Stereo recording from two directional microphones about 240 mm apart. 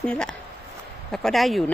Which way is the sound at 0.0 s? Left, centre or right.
Centre.